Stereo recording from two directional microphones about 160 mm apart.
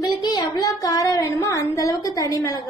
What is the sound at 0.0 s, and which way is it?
Speech, 25° left (ahead or behind).